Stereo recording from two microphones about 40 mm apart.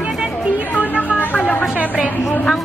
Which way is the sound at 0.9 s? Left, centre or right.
Left.